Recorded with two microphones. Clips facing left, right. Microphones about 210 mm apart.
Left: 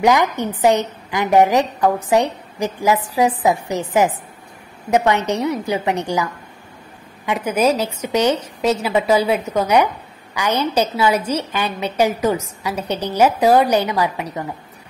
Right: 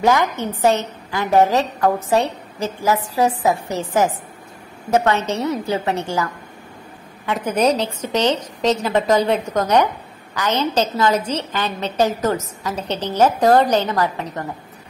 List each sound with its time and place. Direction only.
0.0 s a woman's voice: 15° left (ahead or behind)